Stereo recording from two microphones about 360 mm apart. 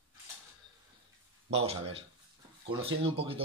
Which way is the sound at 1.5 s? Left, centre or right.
Centre.